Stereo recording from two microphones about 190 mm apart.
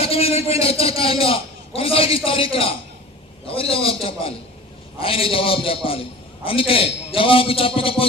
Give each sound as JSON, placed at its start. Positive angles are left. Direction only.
{"t": 0.0, "sound": "a man's voice", "side_deg": 30}